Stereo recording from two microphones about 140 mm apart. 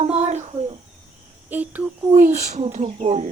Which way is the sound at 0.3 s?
55° right (ahead or behind).